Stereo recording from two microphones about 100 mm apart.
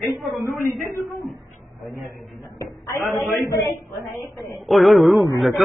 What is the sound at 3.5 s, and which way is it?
Speech, 30° left (ahead or behind).